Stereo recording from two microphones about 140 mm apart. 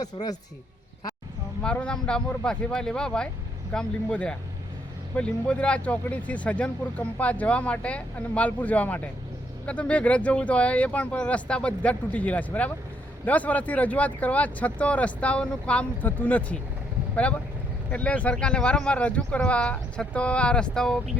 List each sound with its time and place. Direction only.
0.0 s speech: 30° left (ahead or behind)
1.6 s speech: 5° left (ahead or behind)